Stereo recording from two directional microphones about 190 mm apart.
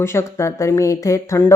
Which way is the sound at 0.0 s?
15° left (ahead or behind).